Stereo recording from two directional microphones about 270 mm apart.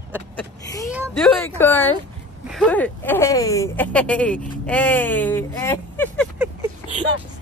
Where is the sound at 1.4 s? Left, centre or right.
Centre.